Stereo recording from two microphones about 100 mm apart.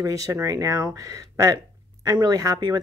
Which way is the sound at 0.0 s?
35° right (ahead or behind).